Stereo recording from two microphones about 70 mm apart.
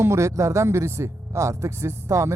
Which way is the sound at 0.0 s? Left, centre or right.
Right.